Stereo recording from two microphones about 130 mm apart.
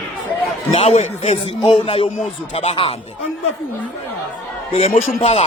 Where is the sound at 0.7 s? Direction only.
55° left (ahead or behind).